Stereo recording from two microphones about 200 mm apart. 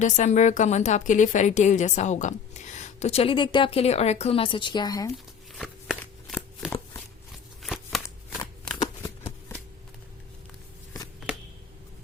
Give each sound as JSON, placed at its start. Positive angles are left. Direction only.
{"t": 0.0, "sound": "a woman's voice", "side_deg": 35}
{"t": 5.1, "sound": "shuffling cards", "side_deg": 0}
{"t": 7.6, "sound": "a sound", "side_deg": 0}